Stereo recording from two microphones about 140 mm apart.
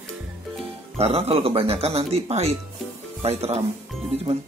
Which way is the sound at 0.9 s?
45° right (ahead or behind).